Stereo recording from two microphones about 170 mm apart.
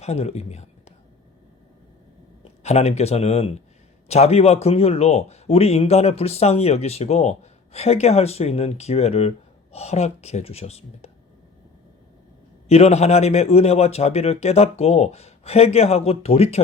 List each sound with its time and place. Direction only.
0.0 s a man's voice: 40° left (ahead or behind)
2.4 s speech: 40° left (ahead or behind)
12.6 s speech: 35° left (ahead or behind)